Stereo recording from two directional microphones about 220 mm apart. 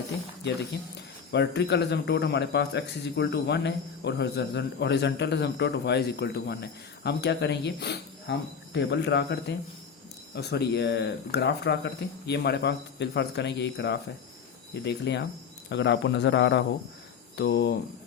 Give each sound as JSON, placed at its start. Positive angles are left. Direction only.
{"t": 0.9, "sound": "speech", "side_deg": 50}